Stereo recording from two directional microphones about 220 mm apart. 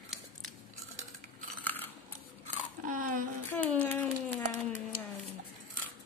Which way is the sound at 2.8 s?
35° right (ahead or behind).